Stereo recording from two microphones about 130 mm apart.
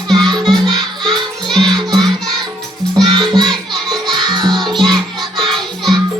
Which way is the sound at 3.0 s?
35° right (ahead or behind).